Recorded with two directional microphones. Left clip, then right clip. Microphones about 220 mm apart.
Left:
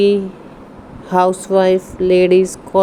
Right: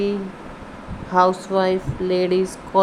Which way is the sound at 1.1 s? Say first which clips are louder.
Left 4 dB; 25° left (ahead or behind).